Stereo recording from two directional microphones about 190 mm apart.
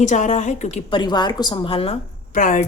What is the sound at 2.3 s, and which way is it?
Speech, 45° left (ahead or behind).